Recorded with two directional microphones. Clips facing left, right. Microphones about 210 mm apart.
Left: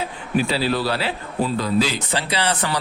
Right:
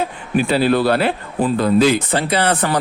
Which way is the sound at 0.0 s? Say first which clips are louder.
Right 3 dB; 55° right (ahead or behind).